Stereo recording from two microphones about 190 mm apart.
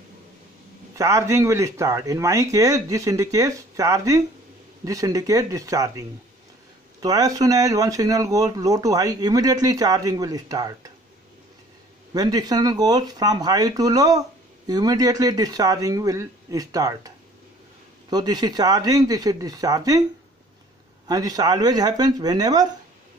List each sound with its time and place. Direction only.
0.9 s speech: 15° right (ahead or behind)
12.1 s speech: 20° right (ahead or behind)
18.1 s speech: 20° right (ahead or behind)
21.1 s speech: 20° right (ahead or behind)